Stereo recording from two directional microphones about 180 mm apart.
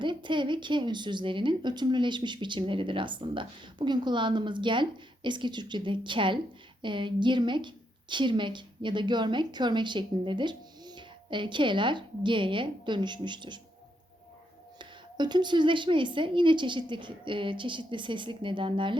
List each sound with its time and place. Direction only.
0.0 s speech: 25° right (ahead or behind)
14.8 s speech: 25° right (ahead or behind)